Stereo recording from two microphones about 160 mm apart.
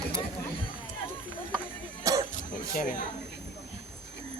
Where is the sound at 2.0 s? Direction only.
20° right (ahead or behind).